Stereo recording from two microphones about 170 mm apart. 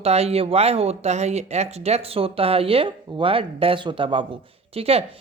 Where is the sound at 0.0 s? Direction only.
35° right (ahead or behind).